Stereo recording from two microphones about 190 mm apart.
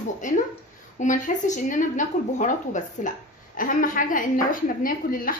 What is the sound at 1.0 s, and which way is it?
A woman's voice, 40° left (ahead or behind).